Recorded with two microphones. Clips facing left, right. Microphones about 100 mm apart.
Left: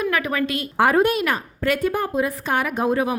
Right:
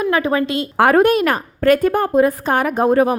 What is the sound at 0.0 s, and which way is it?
Speech, 30° right (ahead or behind).